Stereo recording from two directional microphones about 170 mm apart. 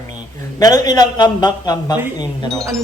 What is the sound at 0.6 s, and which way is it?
A man's voice, 25° left (ahead or behind).